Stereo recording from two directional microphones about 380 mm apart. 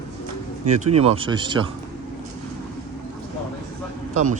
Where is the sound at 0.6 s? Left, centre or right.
Centre.